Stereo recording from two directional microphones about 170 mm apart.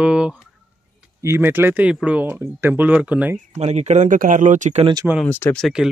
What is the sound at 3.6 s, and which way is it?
Speech, 40° right (ahead or behind).